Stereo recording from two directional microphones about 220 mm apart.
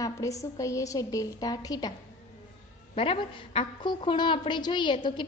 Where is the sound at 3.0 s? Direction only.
25° left (ahead or behind).